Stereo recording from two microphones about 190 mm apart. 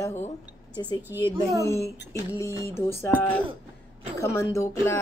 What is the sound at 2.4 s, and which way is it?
Speech, 15° left (ahead or behind).